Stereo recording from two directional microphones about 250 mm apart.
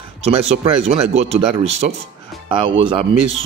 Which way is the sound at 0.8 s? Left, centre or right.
Right.